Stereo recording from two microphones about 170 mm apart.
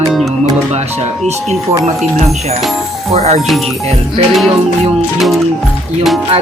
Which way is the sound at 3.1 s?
40° right (ahead or behind).